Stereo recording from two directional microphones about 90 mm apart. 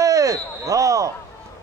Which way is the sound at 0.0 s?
40° right (ahead or behind).